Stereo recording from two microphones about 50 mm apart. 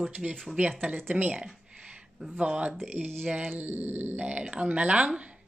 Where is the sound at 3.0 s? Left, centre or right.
Right.